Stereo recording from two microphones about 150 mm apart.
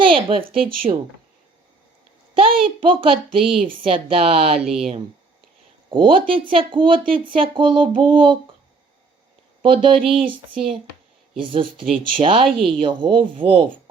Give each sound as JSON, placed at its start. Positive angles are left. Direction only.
{"t": 0.0, "sound": "a sound", "side_deg": -35}
{"t": 0.9, "sound": "speech", "side_deg": -40}
{"t": 2.3, "sound": "speech", "side_deg": -35}
{"t": 9.6, "sound": "speech", "side_deg": -35}